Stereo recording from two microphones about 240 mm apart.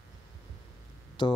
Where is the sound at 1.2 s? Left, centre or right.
Centre.